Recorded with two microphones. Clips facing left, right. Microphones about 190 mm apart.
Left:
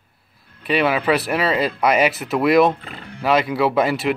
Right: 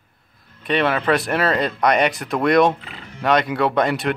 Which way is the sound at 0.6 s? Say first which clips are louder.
Left 1 dB; 5° left (ahead or behind).